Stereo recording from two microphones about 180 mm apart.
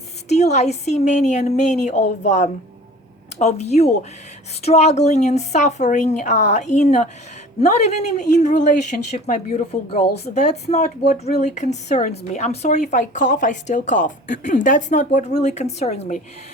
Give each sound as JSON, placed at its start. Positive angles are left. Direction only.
{"t": 0.3, "sound": "a woman's voice", "side_deg": 40}
{"t": 8.4, "sound": "a woman's voice", "side_deg": 40}